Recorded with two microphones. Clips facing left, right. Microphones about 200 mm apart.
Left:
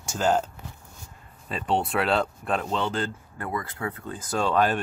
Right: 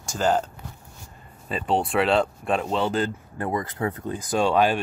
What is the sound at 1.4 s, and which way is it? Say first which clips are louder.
Speech: right 2 dB; centre (ahead or behind).